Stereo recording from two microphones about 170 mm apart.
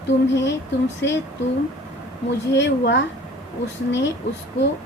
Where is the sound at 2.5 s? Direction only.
90° left.